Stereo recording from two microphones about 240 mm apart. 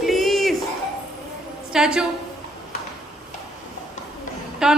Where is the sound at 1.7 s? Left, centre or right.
Centre.